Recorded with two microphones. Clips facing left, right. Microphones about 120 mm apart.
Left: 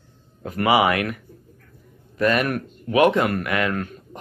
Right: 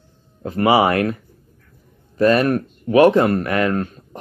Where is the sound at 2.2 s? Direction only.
30° right (ahead or behind).